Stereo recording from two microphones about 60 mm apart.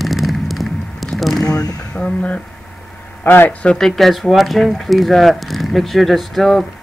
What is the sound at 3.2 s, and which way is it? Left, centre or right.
Speech, left.